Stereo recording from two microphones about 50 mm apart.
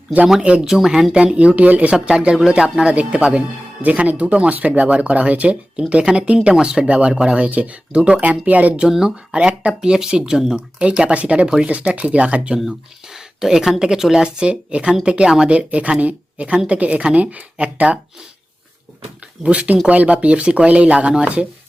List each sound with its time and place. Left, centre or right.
0.6 s speech: centre
1.1 s speech: right
2.0 s speech: centre; by 8.8 s right
8.9 s speech: centre
10.8 s speech: right
12.5 s speech: centre; by 18.0 s right
19.4 s speech: right